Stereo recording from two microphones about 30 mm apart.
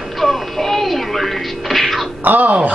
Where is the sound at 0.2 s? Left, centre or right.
Centre.